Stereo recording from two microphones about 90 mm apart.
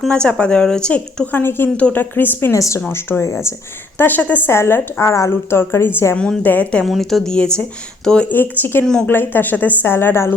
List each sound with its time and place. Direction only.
0.1 s speech: 10° left (ahead or behind)
1.4 s a woman's voice: 25° left (ahead or behind)
2.6 s a woman's voice: 35° left (ahead or behind); by 4.5 s 20° left (ahead or behind)
4.5 s a woman's voice: 30° left (ahead or behind)
6.1 s speech: 10° left (ahead or behind)
6.8 s a woman's voice: centre (ahead or behind)
8.3 s a woman's voice: 20° left (ahead or behind)
8.8 s speech: 10° left (ahead or behind)
9.0 s a woman's voice: 20° left (ahead or behind)